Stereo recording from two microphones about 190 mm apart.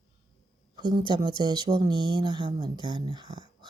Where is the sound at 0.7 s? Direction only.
25° right (ahead or behind).